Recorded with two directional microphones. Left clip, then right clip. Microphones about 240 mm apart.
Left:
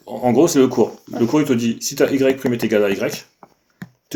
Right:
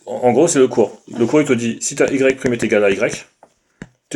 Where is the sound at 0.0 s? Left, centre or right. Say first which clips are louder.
Right 2 dB; right.